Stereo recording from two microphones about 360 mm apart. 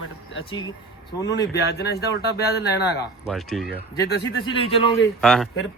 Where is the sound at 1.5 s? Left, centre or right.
Left.